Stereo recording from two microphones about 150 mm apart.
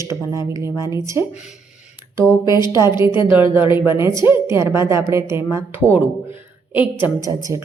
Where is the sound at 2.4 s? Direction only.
30° left (ahead or behind).